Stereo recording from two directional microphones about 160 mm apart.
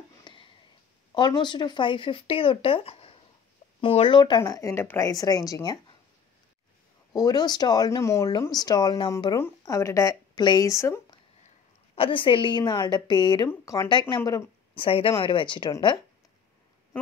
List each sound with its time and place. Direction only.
0.2 s sniff: 30° left (ahead or behind)
1.1 s speech: 30° left (ahead or behind)
7.1 s speech: 25° left (ahead or behind)
11.4 s a woman's voice: 35° left (ahead or behind)